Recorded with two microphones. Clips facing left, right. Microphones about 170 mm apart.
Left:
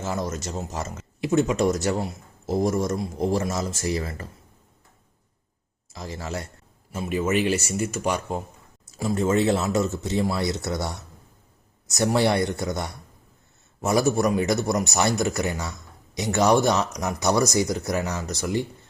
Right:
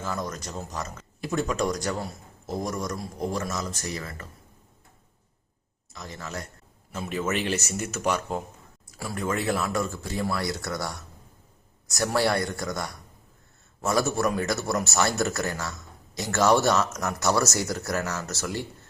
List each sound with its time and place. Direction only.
0.0 s speech: 25° left (ahead or behind)
5.9 s a man's voice: 35° left (ahead or behind)
6.9 s speech: 5° left (ahead or behind)
8.9 s speech: 25° left (ahead or behind)